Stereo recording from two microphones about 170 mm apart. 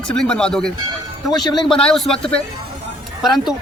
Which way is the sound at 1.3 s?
25° left (ahead or behind).